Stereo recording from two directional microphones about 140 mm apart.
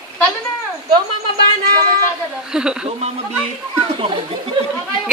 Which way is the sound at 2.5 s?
5° right (ahead or behind).